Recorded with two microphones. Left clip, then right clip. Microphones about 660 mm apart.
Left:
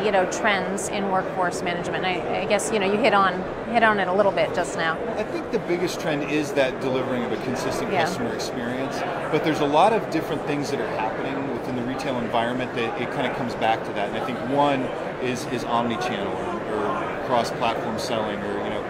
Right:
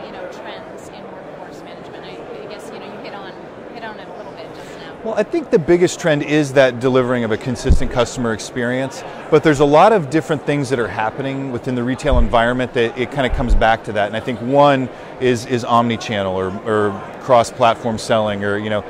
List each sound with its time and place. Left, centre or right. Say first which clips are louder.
5.1 s speech: right 10 dB; right
9.3 s speech: right 11 dB; right
12.0 s speech: right 9 dB; right
17.3 s speech: right 11 dB; right